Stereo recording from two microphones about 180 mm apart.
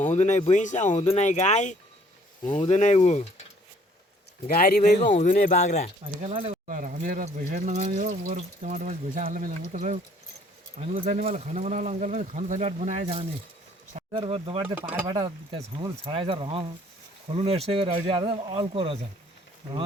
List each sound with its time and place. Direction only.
0.1 s speech: 40° left (ahead or behind)
4.4 s speech: 55° left (ahead or behind); by 5.9 s 40° left (ahead or behind)
6.2 s speech: 35° right (ahead or behind)
6.7 s speech: 50° right (ahead or behind)
10.8 s speech: 35° right (ahead or behind)